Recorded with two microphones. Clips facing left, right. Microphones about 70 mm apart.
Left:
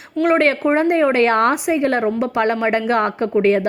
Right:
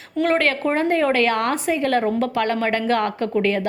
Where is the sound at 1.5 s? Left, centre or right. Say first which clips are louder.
Left 2 dB; centre.